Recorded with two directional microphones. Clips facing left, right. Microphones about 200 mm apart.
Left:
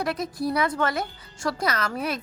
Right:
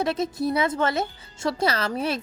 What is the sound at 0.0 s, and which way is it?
Speech, 25° right (ahead or behind).